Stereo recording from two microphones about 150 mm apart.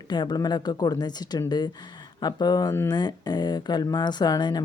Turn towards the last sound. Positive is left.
turn(degrees=30)  # may be behind; listen again after turning